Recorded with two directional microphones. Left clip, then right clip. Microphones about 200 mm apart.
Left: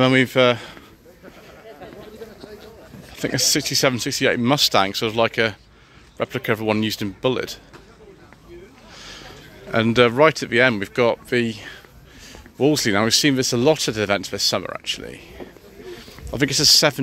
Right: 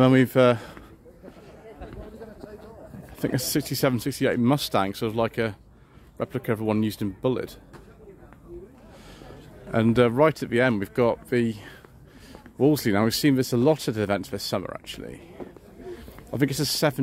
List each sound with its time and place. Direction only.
0.0 s a man's voice: 25° right (ahead or behind)
3.2 s speech: 20° right (ahead or behind); by 7.5 s centre (ahead or behind)
8.9 s speech: 5° right (ahead or behind)